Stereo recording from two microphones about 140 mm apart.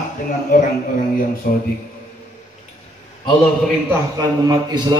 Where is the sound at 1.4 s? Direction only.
90° left.